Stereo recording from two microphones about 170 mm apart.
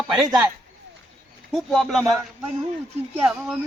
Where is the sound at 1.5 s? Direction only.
Centre (ahead or behind).